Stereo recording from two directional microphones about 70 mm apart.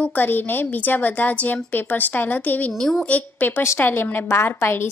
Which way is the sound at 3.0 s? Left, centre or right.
Left.